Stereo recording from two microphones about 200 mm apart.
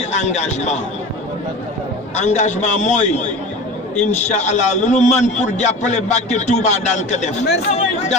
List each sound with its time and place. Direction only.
0.1 s a man's voice: 35° left (ahead or behind)
2.1 s a man's voice: 35° left (ahead or behind)